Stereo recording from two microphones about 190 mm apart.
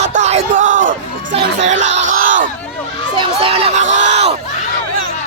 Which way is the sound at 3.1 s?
25° right (ahead or behind).